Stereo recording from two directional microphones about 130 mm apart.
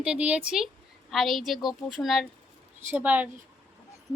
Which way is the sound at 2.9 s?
10° right (ahead or behind).